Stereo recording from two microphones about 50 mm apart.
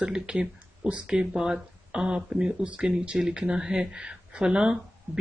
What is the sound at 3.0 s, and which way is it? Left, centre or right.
Speech, centre.